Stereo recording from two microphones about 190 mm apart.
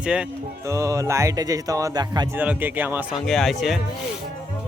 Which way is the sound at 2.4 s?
10° right (ahead or behind).